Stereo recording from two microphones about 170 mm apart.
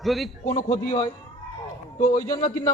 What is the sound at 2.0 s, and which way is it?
Speech, 50° left (ahead or behind).